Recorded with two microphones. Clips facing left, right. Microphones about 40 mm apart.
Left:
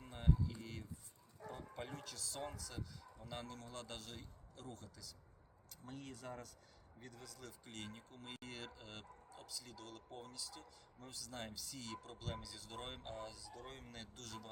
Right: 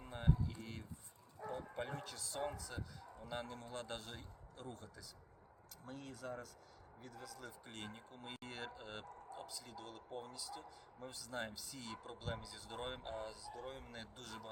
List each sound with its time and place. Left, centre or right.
0.0 s a sound: centre
1.4 s speech: centre
5.8 s speech: centre
7.6 s speech: centre